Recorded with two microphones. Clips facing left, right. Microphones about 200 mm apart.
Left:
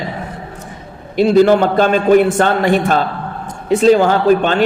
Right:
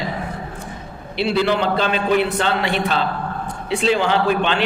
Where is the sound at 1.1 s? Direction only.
45° left (ahead or behind).